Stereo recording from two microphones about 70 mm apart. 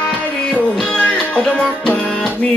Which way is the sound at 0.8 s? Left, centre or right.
Centre.